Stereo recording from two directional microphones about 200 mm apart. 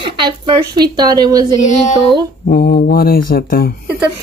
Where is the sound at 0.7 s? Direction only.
20° right (ahead or behind).